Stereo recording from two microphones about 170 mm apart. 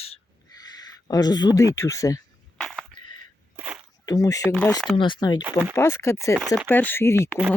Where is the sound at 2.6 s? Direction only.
Centre (ahead or behind).